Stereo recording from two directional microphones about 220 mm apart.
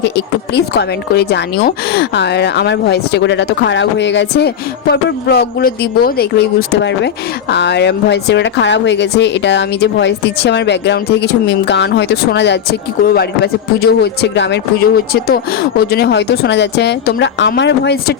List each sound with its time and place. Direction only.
0.0 s a woman's voice: 50° left (ahead or behind)